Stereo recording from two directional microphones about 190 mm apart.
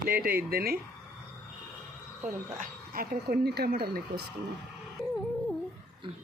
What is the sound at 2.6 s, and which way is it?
Speech, 50° right (ahead or behind).